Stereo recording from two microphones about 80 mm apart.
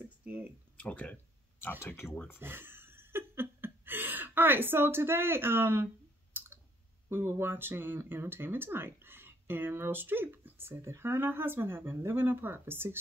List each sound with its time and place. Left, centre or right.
0.7 s speech: centre
2.4 s laughter: right
7.1 s speech: right